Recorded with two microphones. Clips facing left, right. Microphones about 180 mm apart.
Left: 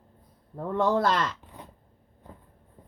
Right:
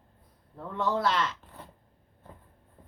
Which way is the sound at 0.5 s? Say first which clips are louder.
Left 5 dB; 45° left (ahead or behind).